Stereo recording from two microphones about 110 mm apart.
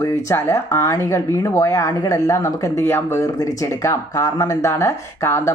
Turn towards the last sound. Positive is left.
turn(degrees=25)  # may be behind; listen again after turning